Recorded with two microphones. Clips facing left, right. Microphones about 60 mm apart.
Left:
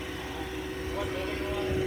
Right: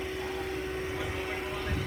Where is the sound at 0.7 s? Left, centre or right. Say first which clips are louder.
Left 1 dB; right.